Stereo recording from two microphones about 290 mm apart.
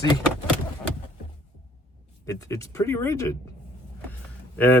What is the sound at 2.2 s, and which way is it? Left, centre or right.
Speech, centre.